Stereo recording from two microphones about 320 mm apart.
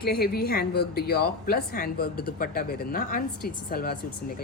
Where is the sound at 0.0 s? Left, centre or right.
Left.